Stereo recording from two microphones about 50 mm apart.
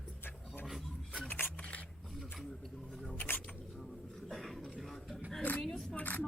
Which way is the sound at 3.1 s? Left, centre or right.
Left.